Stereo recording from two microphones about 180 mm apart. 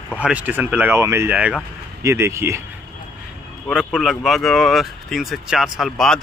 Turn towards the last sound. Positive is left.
turn(degrees=0)  # may be behind; listen again after turning